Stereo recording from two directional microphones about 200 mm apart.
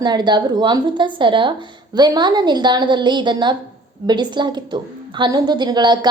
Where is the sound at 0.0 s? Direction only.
20° right (ahead or behind).